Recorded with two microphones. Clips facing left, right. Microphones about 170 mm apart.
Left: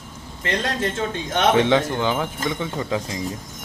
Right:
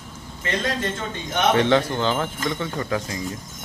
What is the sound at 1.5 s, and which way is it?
Speech, 15° left (ahead or behind).